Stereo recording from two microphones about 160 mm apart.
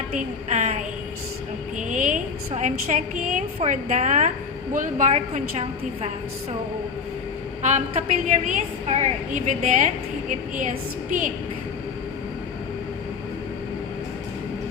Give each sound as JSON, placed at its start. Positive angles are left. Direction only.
{"t": 0.1, "sound": "a woman's voice", "side_deg": -50}
{"t": 1.9, "sound": "a woman's voice", "side_deg": -55}
{"t": 7.6, "sound": "a woman's voice", "side_deg": -50}